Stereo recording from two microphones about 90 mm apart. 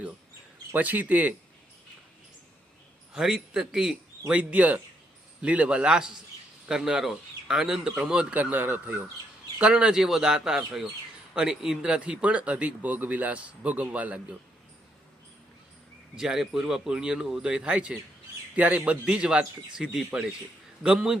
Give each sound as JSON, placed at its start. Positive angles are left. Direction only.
{"t": 0.7, "sound": "speech", "side_deg": -20}
{"t": 3.1, "sound": "speech", "side_deg": -5}
{"t": 16.1, "sound": "speech", "side_deg": -5}